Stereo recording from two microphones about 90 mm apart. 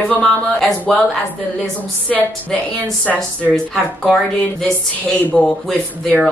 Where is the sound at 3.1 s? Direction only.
5° left (ahead or behind).